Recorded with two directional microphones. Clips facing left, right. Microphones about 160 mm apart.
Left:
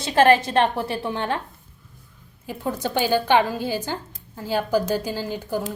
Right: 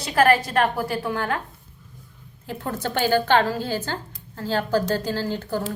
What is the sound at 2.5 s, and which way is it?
A woman's voice, 15° left (ahead or behind).